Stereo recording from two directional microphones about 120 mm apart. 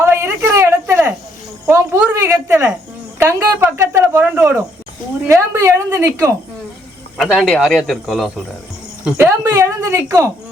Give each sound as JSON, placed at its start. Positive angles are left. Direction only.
{"t": 0.0, "sound": "a sound", "side_deg": -20}
{"t": 1.6, "sound": "cricket", "side_deg": -20}
{"t": 3.2, "sound": "speech", "side_deg": -20}
{"t": 7.2, "sound": "speech", "side_deg": 0}
{"t": 9.1, "sound": "speech", "side_deg": -25}